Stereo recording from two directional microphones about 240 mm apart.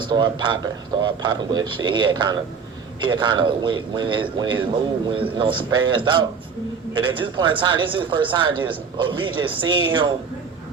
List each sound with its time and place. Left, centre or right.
0.0 s a man's voice: centre